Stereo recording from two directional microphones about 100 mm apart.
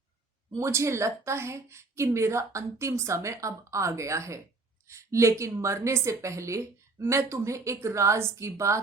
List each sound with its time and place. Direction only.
0.5 s a woman's voice: 30° right (ahead or behind)